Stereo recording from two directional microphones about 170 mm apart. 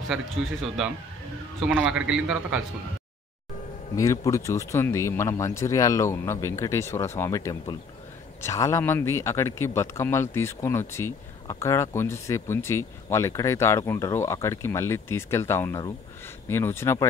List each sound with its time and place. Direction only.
1.6 s a man's voice: 5° right (ahead or behind)
3.9 s speech: 20° left (ahead or behind)